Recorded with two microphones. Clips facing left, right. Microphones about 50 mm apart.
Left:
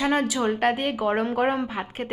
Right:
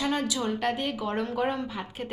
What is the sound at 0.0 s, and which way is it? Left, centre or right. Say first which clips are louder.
A woman's voice: left 5 dB; left.